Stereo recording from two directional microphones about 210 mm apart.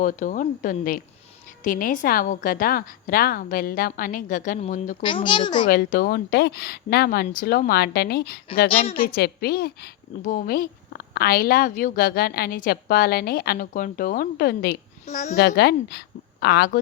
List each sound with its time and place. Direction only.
0.0 s a woman's voice: 40° left (ahead or behind)
5.0 s a child's voice: 25° left (ahead or behind)
5.6 s a woman's voice: 45° left (ahead or behind)
15.0 s a woman's voice: 35° left (ahead or behind)
15.4 s a woman's voice: 50° left (ahead or behind)